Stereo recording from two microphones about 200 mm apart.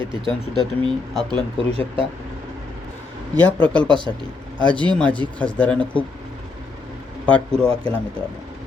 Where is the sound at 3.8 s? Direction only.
25° right (ahead or behind).